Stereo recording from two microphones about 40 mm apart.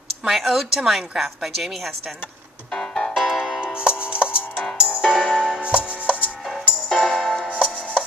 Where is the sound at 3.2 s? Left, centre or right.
Centre.